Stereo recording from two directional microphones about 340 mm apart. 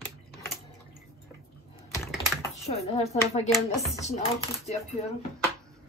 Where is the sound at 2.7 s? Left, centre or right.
Centre.